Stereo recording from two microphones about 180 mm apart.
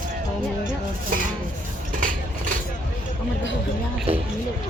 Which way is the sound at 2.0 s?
50° right (ahead or behind).